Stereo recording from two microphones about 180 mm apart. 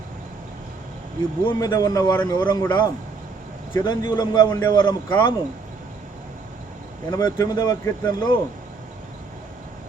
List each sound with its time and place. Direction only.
1.5 s a man's voice: 20° left (ahead or behind)
7.1 s a man's voice: 20° left (ahead or behind)